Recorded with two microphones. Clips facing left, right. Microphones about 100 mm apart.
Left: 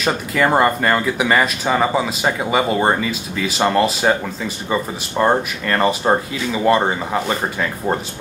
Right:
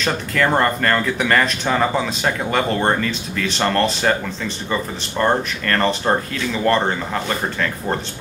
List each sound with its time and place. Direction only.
0.0 s speech: 10° left (ahead or behind)